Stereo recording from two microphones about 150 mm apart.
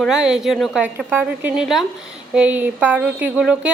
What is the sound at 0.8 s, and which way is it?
A woman's voice, 10° right (ahead or behind).